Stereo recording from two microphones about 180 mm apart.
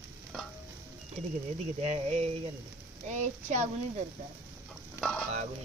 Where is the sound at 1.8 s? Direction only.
35° right (ahead or behind).